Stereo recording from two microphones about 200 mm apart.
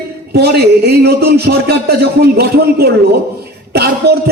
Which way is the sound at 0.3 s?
50° right (ahead or behind).